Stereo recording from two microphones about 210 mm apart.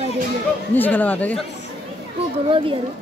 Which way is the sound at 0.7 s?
10° left (ahead or behind).